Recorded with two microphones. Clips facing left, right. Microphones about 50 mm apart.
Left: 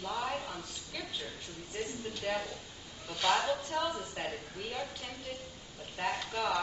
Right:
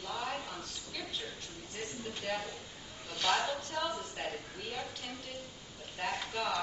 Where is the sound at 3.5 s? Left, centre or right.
Centre.